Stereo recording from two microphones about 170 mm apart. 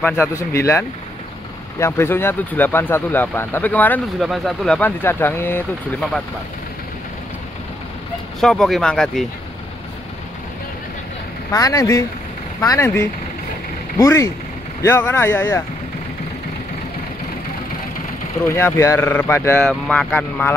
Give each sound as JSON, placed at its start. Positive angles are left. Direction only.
{"t": 0.4, "sound": "speech", "side_deg": 15}
{"t": 8.4, "sound": "speech", "side_deg": 0}
{"t": 11.5, "sound": "speech", "side_deg": 20}
{"t": 18.5, "sound": "speech", "side_deg": 15}